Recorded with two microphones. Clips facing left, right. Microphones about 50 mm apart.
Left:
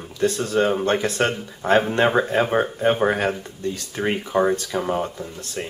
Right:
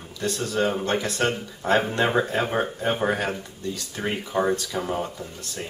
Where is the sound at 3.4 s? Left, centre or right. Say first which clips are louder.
Left 4 dB; left.